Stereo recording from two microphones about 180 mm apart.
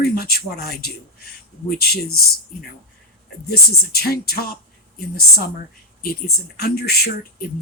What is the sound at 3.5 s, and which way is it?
Speech, 60° left (ahead or behind).